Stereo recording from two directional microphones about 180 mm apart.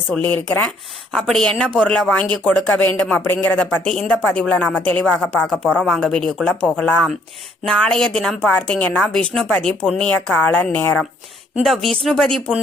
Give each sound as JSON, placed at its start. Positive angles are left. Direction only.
{"t": 0.1, "sound": "a woman's voice", "side_deg": 10}